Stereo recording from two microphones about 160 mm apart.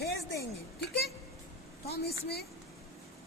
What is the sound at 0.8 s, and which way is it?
A woman's voice, 90° left.